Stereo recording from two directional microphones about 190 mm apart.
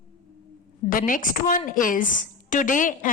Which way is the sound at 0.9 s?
45° left (ahead or behind).